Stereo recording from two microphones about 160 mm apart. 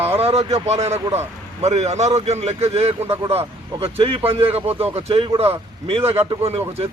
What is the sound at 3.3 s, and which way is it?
Speech, 35° right (ahead or behind).